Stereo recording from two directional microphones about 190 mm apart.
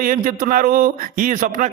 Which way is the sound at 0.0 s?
45° right (ahead or behind).